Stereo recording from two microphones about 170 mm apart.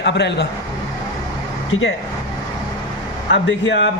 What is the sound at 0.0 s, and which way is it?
Speech, 90° left.